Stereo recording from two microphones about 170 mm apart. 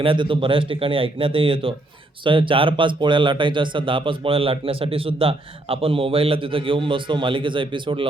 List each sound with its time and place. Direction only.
0.0 s speech: 30° right (ahead or behind)